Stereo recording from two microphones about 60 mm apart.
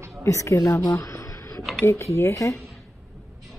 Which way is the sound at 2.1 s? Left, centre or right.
Left.